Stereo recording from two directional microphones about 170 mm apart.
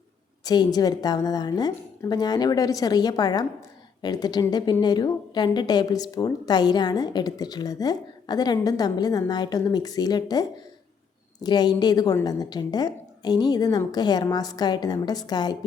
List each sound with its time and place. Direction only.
0.4 s a woman's voice: 25° left (ahead or behind)
11.4 s a woman's voice: 25° left (ahead or behind)